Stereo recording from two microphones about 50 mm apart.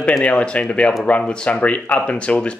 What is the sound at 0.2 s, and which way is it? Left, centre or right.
Speech, left.